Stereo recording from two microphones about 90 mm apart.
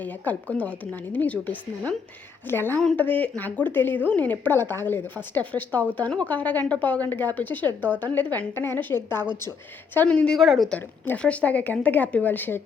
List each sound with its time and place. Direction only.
0.3 s a woman's voice: 20° left (ahead or behind)
10.1 s a woman's voice: 10° left (ahead or behind)
10.4 s speech: centre (ahead or behind)
11.2 s a woman's voice: 15° left (ahead or behind)